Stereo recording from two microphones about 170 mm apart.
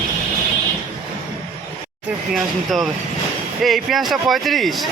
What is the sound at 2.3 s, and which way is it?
Speech, centre (ahead or behind).